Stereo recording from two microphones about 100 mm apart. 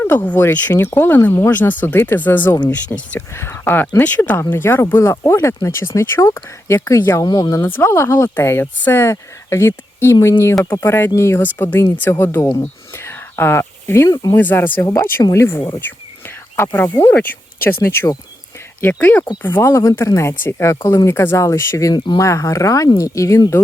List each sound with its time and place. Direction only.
0.3 s speech: 20° left (ahead or behind); by 7.6 s 40° left (ahead or behind)
7.6 s speech: 25° left (ahead or behind)
13.0 s whispering: 25° left (ahead or behind)
14.1 s speech: 40° left (ahead or behind)
14.3 s speech: 20° left (ahead or behind)